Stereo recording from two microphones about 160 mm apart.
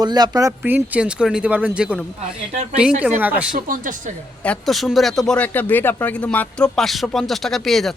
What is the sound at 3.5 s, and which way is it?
Speech, 60° right (ahead or behind).